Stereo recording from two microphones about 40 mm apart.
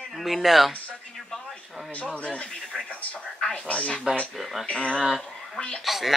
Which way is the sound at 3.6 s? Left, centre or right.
Left.